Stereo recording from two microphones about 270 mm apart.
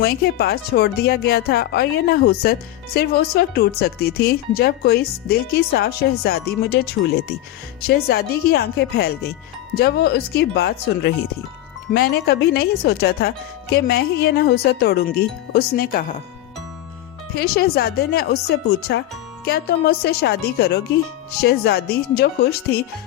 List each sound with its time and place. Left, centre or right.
0.0 s speech: left
17.3 s speech: left